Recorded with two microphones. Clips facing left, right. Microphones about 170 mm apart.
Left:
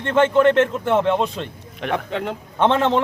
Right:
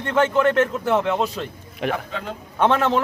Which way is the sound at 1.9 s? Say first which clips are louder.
Left 4 dB; 65° left (ahead or behind).